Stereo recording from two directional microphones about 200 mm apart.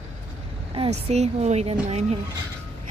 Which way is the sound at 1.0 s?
30° right (ahead or behind).